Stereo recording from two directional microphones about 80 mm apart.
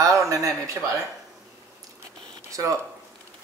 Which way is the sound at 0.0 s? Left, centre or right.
Right.